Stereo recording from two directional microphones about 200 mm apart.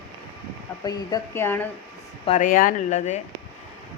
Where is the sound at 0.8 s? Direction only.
20° left (ahead or behind).